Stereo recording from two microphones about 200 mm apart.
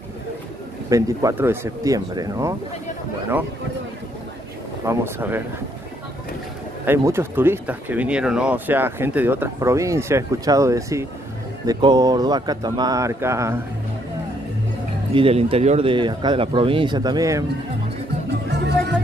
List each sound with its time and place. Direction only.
0.8 s speech: 15° right (ahead or behind)
4.8 s speech: 10° right (ahead or behind)
6.9 s speech: 10° right (ahead or behind)
15.1 s speech: 25° right (ahead or behind)